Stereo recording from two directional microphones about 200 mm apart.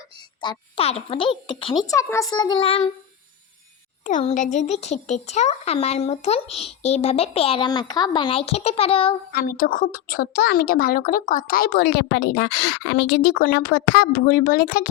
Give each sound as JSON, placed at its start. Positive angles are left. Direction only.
{"t": 0.4, "sound": "a child's voice", "side_deg": 25}
{"t": 1.9, "sound": "a child's voice", "side_deg": 15}
{"t": 4.0, "sound": "speech", "side_deg": 35}
{"t": 9.3, "sound": "a woman's voice", "side_deg": 45}